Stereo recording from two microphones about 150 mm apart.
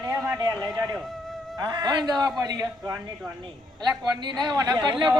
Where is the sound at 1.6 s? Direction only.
30° right (ahead or behind).